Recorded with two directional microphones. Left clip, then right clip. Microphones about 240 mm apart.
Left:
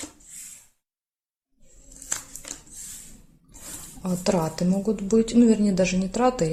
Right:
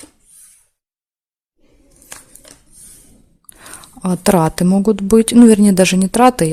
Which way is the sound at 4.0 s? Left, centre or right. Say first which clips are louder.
Right 11 dB; right.